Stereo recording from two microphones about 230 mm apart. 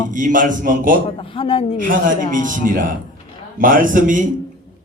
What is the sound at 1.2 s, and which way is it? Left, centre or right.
Speech, left.